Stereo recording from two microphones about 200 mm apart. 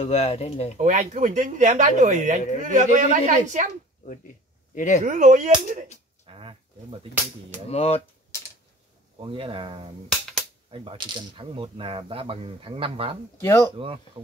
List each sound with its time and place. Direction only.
0.0 s speech: 30° left (ahead or behind)
0.7 s speech: 40° right (ahead or behind)
4.7 s speech: 40° left (ahead or behind)
5.0 s speech: 40° right (ahead or behind)
6.2 s a sound: 25° right (ahead or behind)
7.7 s speech: 30° left (ahead or behind)
9.2 s speech: 25° right (ahead or behind)
13.4 s speech: 15° left (ahead or behind)